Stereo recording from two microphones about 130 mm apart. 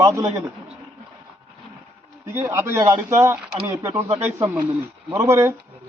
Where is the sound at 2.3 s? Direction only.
20° right (ahead or behind).